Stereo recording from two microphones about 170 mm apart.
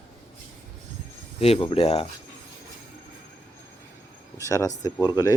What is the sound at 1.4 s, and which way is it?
Speech, 35° left (ahead or behind).